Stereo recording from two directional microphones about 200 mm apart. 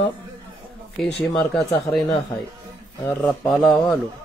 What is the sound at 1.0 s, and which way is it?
Speech, 5° left (ahead or behind).